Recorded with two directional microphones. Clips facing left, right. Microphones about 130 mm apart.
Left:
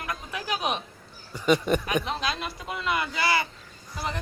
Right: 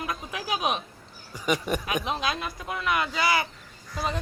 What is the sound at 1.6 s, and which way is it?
Speech, 10° right (ahead or behind).